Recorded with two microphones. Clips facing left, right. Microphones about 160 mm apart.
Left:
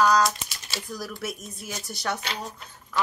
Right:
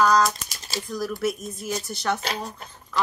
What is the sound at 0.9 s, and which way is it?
Speech, 5° left (ahead or behind).